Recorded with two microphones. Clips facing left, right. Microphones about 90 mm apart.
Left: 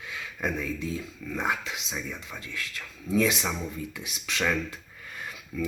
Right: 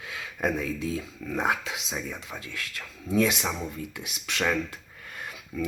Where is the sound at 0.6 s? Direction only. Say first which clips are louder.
Right 2 dB; 80° right.